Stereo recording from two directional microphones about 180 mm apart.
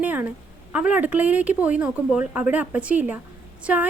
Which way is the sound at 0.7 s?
5° right (ahead or behind).